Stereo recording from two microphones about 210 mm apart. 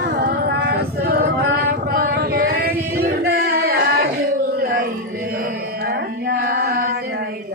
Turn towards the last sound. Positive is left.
turn(degrees=-45)  # may be behind; listen again after turning